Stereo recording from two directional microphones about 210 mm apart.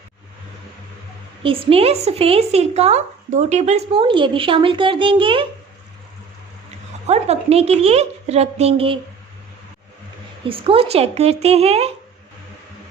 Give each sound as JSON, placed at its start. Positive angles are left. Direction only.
{"t": 1.4, "sound": "a woman's voice", "side_deg": -25}
{"t": 7.1, "sound": "a woman's voice", "side_deg": -30}
{"t": 10.4, "sound": "a woman's voice", "side_deg": -25}